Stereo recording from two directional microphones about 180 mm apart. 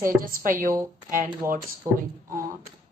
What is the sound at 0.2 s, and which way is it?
Speech, 50° right (ahead or behind).